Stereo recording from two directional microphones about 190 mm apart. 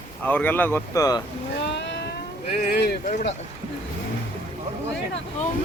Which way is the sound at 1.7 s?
65° left (ahead or behind).